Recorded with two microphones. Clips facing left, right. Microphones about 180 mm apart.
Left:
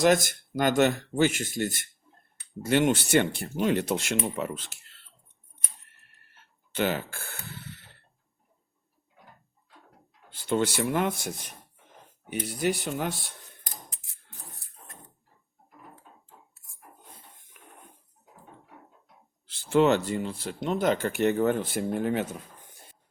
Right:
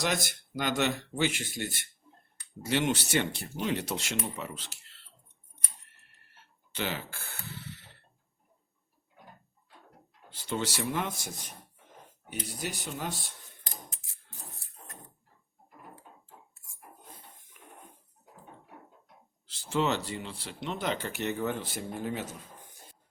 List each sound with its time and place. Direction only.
0.0 s speech: 50° left (ahead or behind)
6.7 s speech: 50° left (ahead or behind)
10.5 s speech: 55° left (ahead or behind)
12.3 s speech: 65° left (ahead or behind)
19.5 s speech: 55° left (ahead or behind)